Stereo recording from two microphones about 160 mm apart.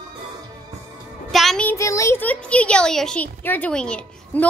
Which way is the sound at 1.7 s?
20° left (ahead or behind).